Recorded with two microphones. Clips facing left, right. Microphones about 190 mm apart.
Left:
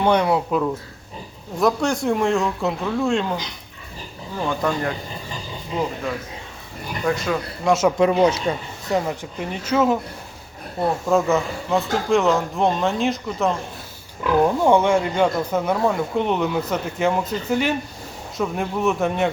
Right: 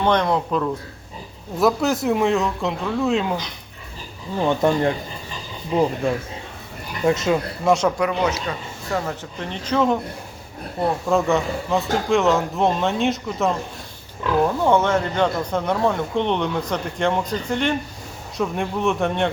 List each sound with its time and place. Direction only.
0.0 s a man's voice: 10° left (ahead or behind)
1.5 s speech: 5° right (ahead or behind)
4.4 s speech: 25° right (ahead or behind)
7.0 s speech: 20° right (ahead or behind)
7.6 s speech: centre (ahead or behind)
7.9 s a man's voice: 30° left (ahead or behind); by 10.0 s 5° left (ahead or behind)
11.0 s speech: centre (ahead or behind)
14.4 s speech: 15° left (ahead or behind)